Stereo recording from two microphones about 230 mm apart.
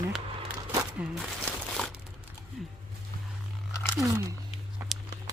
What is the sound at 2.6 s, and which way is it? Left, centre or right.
Speech, centre.